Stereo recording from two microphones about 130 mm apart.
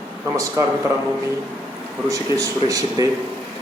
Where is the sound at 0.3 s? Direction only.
25° right (ahead or behind).